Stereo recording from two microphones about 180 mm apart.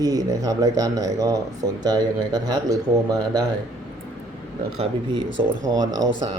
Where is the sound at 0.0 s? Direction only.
20° right (ahead or behind).